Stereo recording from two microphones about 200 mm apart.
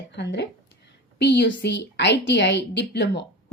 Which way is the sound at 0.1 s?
60° left (ahead or behind).